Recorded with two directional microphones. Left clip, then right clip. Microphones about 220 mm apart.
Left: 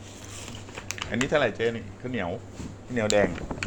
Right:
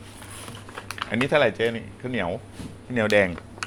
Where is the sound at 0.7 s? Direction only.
15° left (ahead or behind).